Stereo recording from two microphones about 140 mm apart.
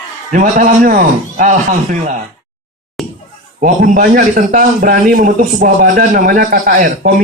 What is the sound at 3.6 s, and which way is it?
A man's voice, 75° right (ahead or behind).